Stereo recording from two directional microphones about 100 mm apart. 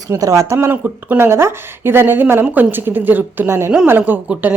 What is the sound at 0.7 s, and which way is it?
A woman's voice, 15° right (ahead or behind).